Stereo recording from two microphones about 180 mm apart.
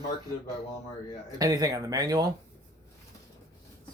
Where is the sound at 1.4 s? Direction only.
20° right (ahead or behind).